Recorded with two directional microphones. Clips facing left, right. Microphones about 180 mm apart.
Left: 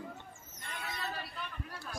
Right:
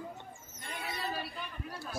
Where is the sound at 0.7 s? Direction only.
25° right (ahead or behind).